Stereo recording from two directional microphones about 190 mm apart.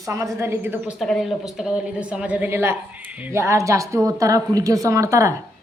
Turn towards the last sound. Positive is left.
turn(degrees=-15)  # may be behind; listen again after turning